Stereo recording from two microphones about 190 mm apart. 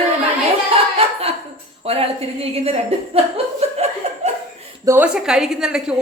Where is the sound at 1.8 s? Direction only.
30° right (ahead or behind).